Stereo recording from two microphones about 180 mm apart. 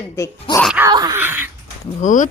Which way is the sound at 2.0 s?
45° left (ahead or behind).